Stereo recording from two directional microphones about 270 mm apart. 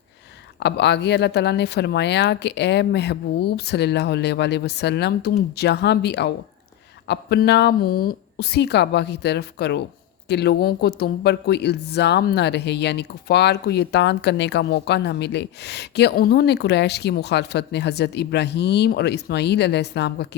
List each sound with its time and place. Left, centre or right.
0.6 s speech: left